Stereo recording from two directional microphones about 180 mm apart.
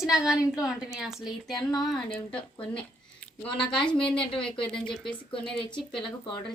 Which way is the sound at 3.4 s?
25° left (ahead or behind).